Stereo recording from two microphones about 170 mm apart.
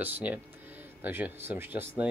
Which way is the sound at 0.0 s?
10° right (ahead or behind).